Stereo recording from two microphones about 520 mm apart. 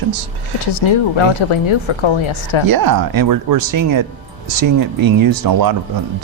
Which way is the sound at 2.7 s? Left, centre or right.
Right.